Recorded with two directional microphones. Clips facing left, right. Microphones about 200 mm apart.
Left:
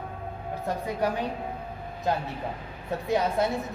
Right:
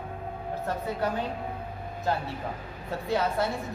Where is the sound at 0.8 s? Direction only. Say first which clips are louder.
Left 2 dB; 15° left (ahead or behind).